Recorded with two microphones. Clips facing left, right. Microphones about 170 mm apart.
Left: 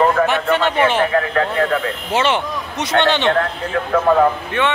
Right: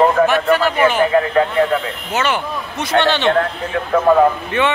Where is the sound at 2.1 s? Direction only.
25° left (ahead or behind).